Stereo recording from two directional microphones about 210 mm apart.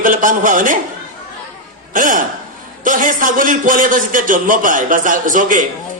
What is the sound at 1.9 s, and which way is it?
A man's voice, 40° right (ahead or behind).